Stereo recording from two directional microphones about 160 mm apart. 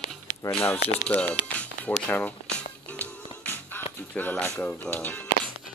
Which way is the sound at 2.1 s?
10° left (ahead or behind).